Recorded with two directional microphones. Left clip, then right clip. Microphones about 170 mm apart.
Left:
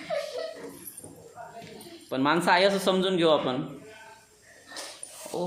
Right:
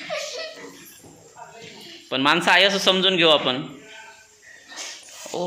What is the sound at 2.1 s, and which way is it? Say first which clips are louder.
A man's voice: right 6 dB; centre (ahead or behind).